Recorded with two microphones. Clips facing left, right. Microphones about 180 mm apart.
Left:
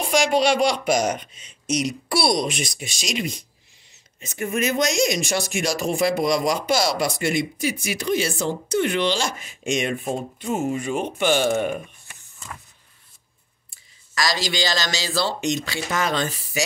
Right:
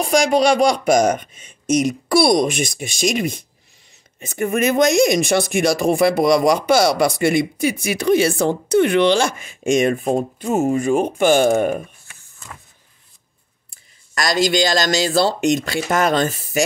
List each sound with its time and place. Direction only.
0.0 s speech: 40° right (ahead or behind); by 9.3 s 60° right (ahead or behind)
9.6 s speech: 45° right (ahead or behind)
14.1 s speech: 50° right (ahead or behind)